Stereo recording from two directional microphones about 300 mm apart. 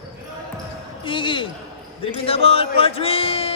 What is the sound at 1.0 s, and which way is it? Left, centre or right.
Speech, centre.